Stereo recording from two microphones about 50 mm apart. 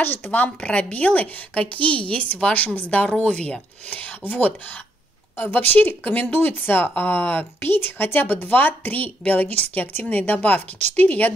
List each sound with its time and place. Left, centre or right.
0.0 s speech: left
0.3 s a woman's voice: left